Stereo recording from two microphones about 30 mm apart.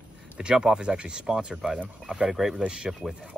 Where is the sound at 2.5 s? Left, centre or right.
Right.